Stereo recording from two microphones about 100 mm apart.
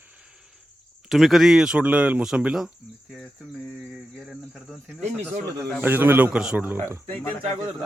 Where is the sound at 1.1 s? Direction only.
Centre (ahead or behind).